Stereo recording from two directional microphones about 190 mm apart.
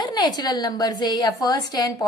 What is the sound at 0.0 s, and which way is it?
A woman's voice, 20° left (ahead or behind).